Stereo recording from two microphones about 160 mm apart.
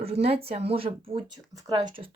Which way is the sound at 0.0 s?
40° right (ahead or behind).